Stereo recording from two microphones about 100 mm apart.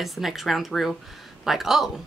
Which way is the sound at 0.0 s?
Centre (ahead or behind).